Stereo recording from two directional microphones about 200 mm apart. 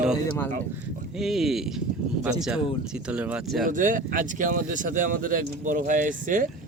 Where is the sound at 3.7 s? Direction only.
40° right (ahead or behind).